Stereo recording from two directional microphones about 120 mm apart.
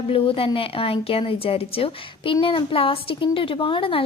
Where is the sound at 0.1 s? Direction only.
50° left (ahead or behind).